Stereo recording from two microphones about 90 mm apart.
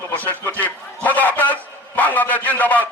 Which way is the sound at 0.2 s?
20° left (ahead or behind).